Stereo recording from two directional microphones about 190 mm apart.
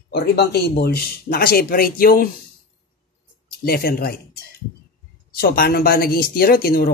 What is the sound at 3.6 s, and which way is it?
Speech, 55° left (ahead or behind).